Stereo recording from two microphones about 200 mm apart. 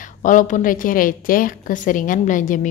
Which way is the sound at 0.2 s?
40° left (ahead or behind).